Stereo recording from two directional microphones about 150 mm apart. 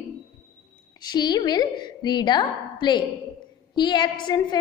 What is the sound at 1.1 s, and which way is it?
A woman's voice, 25° left (ahead or behind).